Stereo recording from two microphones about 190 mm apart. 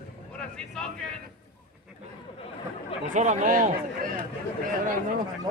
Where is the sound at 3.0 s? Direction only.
40° right (ahead or behind).